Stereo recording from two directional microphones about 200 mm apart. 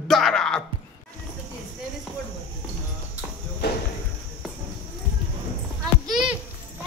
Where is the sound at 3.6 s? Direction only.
55° left (ahead or behind).